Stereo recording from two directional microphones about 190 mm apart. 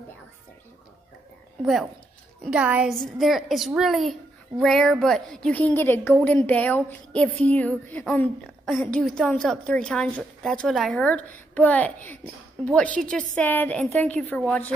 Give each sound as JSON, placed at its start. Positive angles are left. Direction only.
{"t": 1.6, "sound": "a woman's voice", "side_deg": 0}